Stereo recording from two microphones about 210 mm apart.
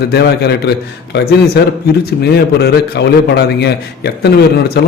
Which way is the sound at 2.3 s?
50° left (ahead or behind).